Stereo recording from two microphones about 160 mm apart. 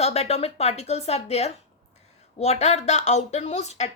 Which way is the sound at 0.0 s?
40° left (ahead or behind).